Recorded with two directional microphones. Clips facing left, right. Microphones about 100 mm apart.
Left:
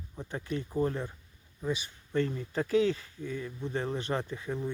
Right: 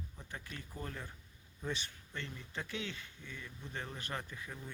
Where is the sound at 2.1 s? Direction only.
40° left (ahead or behind).